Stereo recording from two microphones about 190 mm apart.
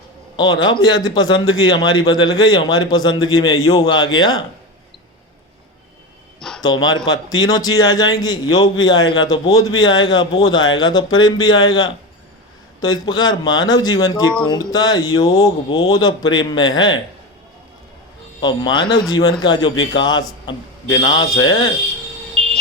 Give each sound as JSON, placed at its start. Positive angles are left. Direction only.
{"t": 0.3, "sound": "a man's voice", "side_deg": 20}
{"t": 6.6, "sound": "a man's voice", "side_deg": 20}
{"t": 12.8, "sound": "a man's voice", "side_deg": 20}
{"t": 18.3, "sound": "a man's voice", "side_deg": 25}
{"t": 22.4, "sound": "a sound", "side_deg": 0}